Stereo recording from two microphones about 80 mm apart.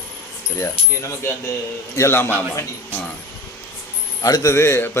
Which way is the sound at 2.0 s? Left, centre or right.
Left.